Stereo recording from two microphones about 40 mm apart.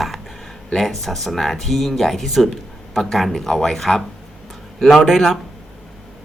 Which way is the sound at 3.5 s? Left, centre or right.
Centre.